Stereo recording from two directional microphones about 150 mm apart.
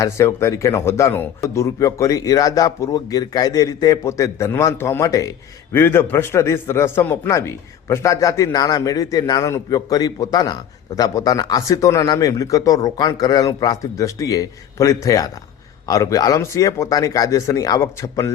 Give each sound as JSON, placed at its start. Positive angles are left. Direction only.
{"t": 0.0, "sound": "a man's voice", "side_deg": 20}